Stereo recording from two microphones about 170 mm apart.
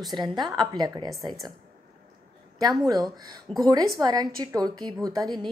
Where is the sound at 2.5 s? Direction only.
20° right (ahead or behind).